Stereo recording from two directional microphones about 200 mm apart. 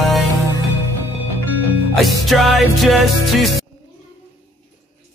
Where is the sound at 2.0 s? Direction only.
Centre (ahead or behind).